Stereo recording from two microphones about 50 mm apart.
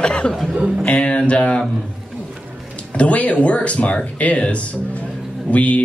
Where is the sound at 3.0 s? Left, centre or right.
Left.